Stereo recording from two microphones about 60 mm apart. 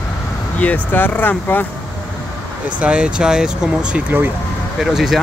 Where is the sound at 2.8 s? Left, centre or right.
Centre.